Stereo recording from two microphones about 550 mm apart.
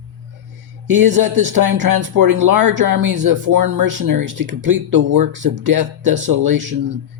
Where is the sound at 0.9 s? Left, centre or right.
Right.